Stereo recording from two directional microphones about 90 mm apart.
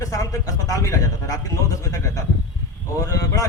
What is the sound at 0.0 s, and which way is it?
A man's voice, 35° left (ahead or behind).